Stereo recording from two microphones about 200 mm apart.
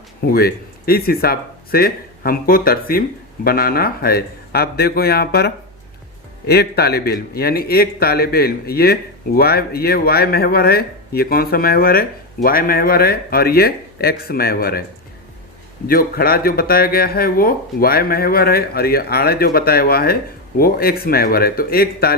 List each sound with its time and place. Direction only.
0.2 s a man's voice: 50° left (ahead or behind)
6.5 s a man's voice: 50° left (ahead or behind)
15.9 s a man's voice: 45° left (ahead or behind)